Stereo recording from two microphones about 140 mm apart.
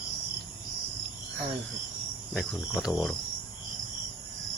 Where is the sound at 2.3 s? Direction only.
Centre (ahead or behind).